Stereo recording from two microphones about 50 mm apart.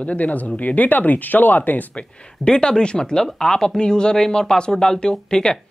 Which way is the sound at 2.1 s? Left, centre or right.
Centre.